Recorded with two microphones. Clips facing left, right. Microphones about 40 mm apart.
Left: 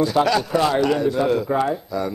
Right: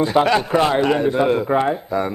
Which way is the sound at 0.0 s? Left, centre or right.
Right.